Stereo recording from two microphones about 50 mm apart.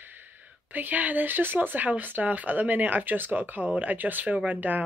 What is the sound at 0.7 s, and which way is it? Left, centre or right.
Speech, right.